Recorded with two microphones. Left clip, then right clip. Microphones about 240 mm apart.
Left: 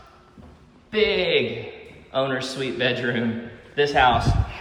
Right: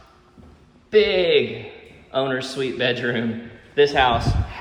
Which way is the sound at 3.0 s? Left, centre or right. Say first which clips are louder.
Right 1 dB; centre.